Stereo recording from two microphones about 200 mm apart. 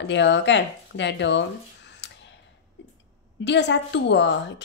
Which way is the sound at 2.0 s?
60° left (ahead or behind).